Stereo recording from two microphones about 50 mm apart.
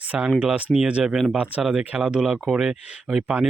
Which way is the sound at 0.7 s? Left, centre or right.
Centre.